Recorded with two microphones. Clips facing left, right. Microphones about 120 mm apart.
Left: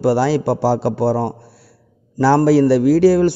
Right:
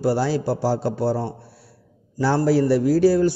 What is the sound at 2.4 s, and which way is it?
Speech, 85° left.